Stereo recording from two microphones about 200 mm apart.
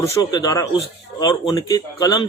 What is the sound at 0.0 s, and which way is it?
A man's voice, 20° left (ahead or behind).